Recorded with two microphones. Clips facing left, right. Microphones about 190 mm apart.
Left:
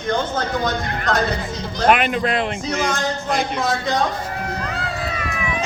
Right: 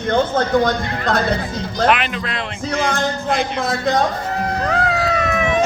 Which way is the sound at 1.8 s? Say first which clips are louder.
Left 3 dB; 45° left (ahead or behind).